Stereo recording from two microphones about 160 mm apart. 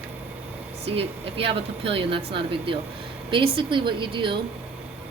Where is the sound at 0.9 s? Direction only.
35° right (ahead or behind).